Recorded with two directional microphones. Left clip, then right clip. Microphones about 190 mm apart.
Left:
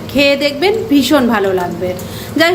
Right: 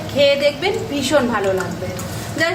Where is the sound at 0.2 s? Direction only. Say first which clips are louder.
Left 3 dB; 45° left (ahead or behind).